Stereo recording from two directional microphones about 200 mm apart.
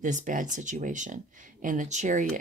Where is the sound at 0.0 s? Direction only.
40° right (ahead or behind).